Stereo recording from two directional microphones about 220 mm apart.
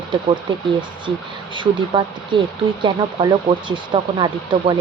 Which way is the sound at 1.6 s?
20° right (ahead or behind).